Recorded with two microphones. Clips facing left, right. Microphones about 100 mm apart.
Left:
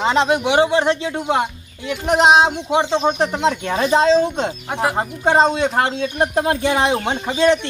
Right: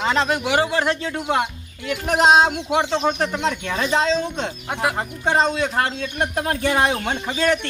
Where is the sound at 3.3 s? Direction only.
35° left (ahead or behind).